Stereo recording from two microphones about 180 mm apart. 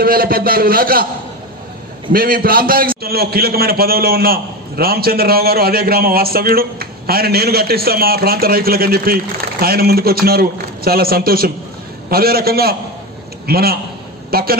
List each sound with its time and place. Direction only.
0.0 s a man's voice: 55° right (ahead or behind)
2.1 s a man's voice: 55° right (ahead or behind)